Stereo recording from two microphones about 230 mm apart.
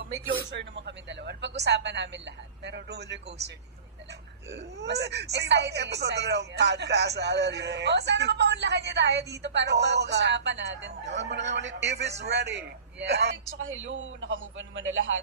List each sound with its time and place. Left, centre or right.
0.0 s speech: right
13.6 s a man's voice: right